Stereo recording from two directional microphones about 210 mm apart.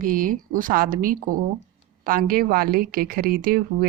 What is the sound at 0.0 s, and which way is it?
A woman's voice, 40° right (ahead or behind).